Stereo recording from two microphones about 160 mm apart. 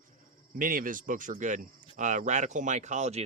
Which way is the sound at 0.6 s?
60° right (ahead or behind).